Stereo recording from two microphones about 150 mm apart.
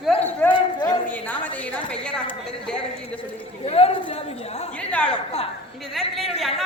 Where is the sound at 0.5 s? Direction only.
30° left (ahead or behind).